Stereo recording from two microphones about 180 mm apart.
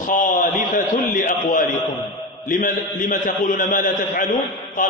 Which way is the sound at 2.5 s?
45° left (ahead or behind).